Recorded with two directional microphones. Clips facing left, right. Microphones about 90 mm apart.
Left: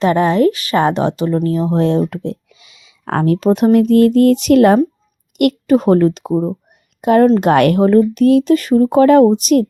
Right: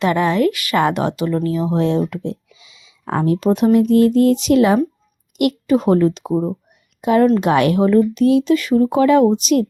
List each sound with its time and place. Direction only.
0.0 s a woman's voice: 35° left (ahead or behind)
1.5 s a woman's voice: 40° left (ahead or behind)